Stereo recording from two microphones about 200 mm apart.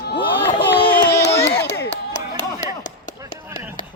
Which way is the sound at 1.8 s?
60° left (ahead or behind).